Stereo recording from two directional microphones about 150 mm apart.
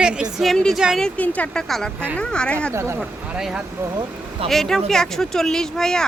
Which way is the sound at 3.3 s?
5° right (ahead or behind).